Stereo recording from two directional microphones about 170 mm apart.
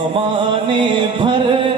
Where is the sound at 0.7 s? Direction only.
30° right (ahead or behind).